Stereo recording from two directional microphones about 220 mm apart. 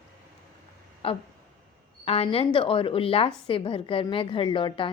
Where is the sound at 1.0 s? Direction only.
25° left (ahead or behind).